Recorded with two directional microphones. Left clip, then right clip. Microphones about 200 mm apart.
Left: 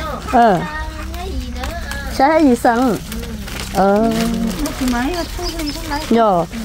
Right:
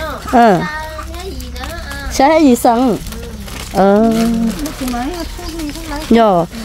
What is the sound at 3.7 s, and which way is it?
Speech, 35° right (ahead or behind).